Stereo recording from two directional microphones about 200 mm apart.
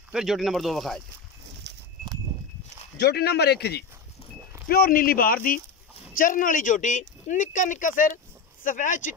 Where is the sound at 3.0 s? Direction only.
55° left (ahead or behind).